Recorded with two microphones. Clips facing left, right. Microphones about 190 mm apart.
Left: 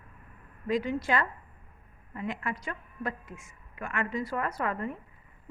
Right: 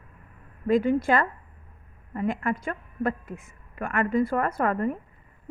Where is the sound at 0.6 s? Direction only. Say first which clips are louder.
Right 7 dB; 50° right (ahead or behind).